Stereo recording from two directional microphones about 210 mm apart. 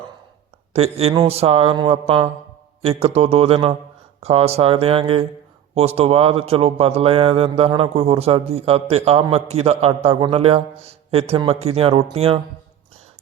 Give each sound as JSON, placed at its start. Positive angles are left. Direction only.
{"t": 0.7, "sound": "speech", "side_deg": -30}